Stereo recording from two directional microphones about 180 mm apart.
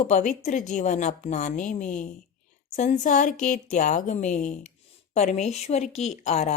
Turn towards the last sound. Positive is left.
turn(degrees=40)  # may be behind; listen again after turning